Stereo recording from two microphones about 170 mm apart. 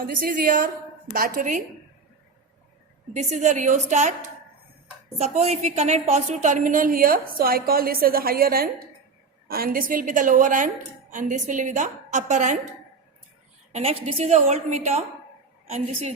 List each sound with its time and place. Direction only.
0.0 s a woman's voice: 55° right (ahead or behind)
3.1 s a woman's voice: 45° right (ahead or behind)
13.7 s a woman's voice: 35° right (ahead or behind)